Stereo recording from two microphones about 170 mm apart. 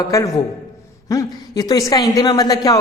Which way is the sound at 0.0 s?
20° left (ahead or behind).